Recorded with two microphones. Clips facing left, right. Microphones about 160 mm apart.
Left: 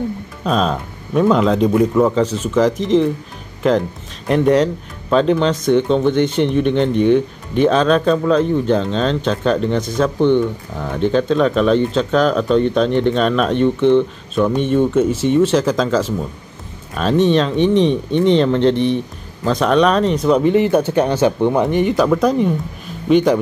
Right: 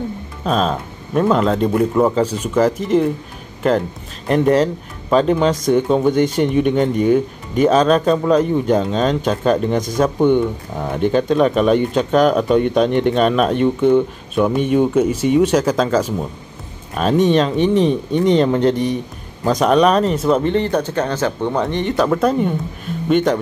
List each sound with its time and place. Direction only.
0.4 s speech: centre (ahead or behind)
4.3 s speech: centre (ahead or behind)